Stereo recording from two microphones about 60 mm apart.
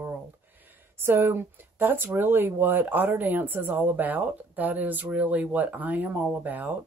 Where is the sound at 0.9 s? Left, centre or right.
Right.